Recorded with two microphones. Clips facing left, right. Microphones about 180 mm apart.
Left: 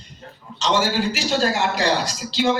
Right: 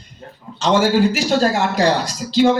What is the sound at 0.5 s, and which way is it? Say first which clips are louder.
A man's voice: right 6 dB; 55° right (ahead or behind).